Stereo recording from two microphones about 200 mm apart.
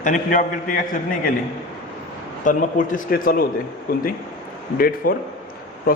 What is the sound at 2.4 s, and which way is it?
A man's voice, 40° left (ahead or behind).